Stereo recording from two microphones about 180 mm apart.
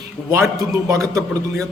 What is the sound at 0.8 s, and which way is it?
Speech, 15° right (ahead or behind).